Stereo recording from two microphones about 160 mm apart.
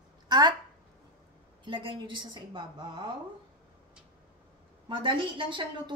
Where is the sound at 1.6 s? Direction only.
30° right (ahead or behind).